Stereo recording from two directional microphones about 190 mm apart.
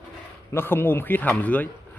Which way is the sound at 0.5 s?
10° left (ahead or behind).